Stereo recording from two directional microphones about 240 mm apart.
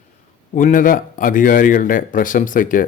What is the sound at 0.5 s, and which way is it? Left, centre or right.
Speech, left.